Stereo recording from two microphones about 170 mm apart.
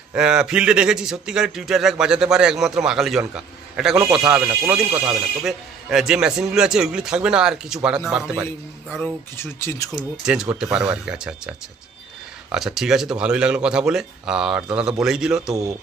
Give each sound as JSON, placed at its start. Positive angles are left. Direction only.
{"t": 0.1, "sound": "a man's voice", "side_deg": -5}
{"t": 9.0, "sound": "speech", "side_deg": 10}
{"t": 9.9, "sound": "a man's voice", "side_deg": -5}